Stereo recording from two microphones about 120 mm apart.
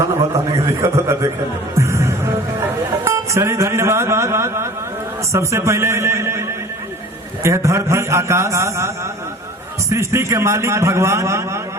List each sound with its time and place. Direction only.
0.0 s speech: 25° right (ahead or behind)
1.7 s music: 25° right (ahead or behind)
3.0 s speech: 25° right (ahead or behind)
7.4 s speech: 25° right (ahead or behind)
9.9 s speech: 25° right (ahead or behind)